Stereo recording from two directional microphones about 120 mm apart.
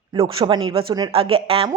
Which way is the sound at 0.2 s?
40° right (ahead or behind).